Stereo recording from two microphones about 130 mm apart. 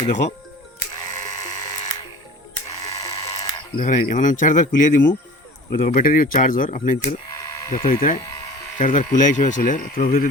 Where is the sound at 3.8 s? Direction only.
80° left; by 7.1 s 60° left (ahead or behind).